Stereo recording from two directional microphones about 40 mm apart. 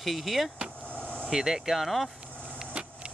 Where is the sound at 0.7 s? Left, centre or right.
Left.